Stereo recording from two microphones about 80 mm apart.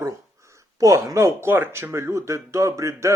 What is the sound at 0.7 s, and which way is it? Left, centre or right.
Speech, right.